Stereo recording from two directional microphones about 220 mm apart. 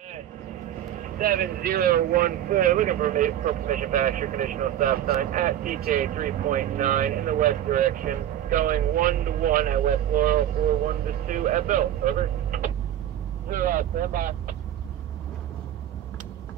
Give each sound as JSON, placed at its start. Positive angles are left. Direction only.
{"t": 1.1, "sound": "speech", "side_deg": -40}